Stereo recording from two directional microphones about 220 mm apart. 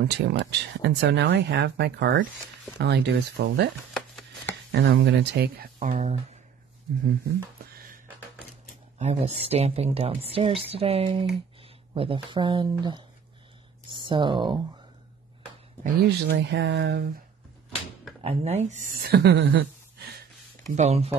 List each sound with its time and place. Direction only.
0.1 s speech: 50° right (ahead or behind)
3.9 s chopping: centre (ahead or behind)
4.8 s speech: 50° right (ahead or behind)
5.9 s speech: 30° right (ahead or behind)
8.9 s speech: 30° right (ahead or behind)
15.8 s speech: 45° right (ahead or behind)
18.2 s speech: 30° right (ahead or behind)
19.0 s speech: 45° right (ahead or behind)
20.7 s speech: 30° right (ahead or behind)